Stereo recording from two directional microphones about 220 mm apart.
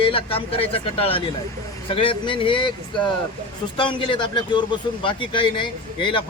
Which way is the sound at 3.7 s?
20° left (ahead or behind).